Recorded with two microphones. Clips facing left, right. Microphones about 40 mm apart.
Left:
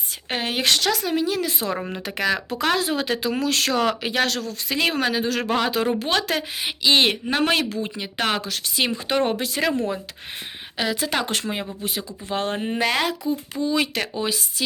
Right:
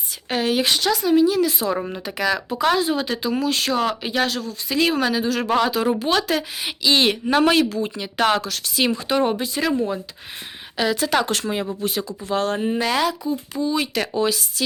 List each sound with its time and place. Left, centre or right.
0.3 s speech: left
0.6 s speech: left
1.4 s speech: left
2.5 s speech: left
4.7 s speech: left
6.8 s speech: left
9.0 s speech: left
10.8 s a woman's voice: centre
11.2 s speech: left
11.8 s speech: centre
12.3 s speech: left
13.7 s speech: left
14.2 s speech: centre